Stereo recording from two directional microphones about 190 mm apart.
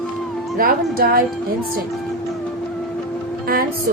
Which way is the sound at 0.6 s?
50° right (ahead or behind).